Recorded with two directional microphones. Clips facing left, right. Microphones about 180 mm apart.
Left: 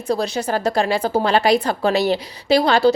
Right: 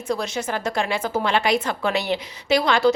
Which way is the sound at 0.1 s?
35° left (ahead or behind).